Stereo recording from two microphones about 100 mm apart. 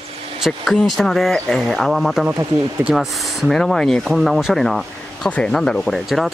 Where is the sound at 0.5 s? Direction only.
5° left (ahead or behind).